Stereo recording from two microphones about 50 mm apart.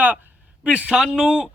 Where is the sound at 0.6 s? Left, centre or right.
Right.